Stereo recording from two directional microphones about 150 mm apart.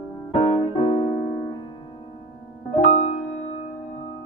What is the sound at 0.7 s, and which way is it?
Keyboard, 40° left (ahead or behind).